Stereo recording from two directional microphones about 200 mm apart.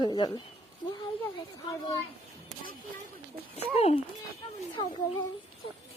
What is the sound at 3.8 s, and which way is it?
Speech, 30° left (ahead or behind).